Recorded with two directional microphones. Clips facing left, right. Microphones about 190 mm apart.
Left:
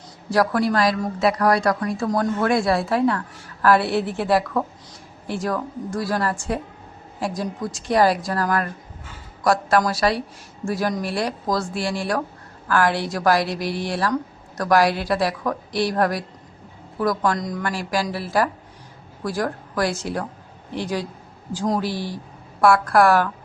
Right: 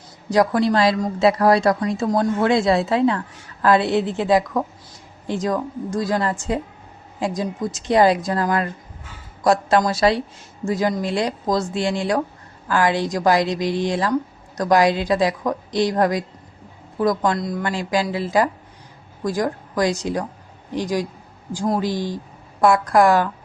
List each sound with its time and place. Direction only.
0.3 s a woman's voice: 20° right (ahead or behind)